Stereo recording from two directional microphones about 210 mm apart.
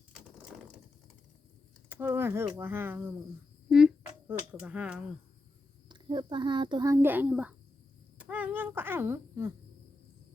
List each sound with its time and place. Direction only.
1.9 s speech: 10° right (ahead or behind)
5.9 s a child's voice: 20° right (ahead or behind)